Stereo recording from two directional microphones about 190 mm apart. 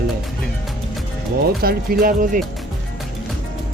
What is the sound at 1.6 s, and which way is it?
Speech, 50° right (ahead or behind).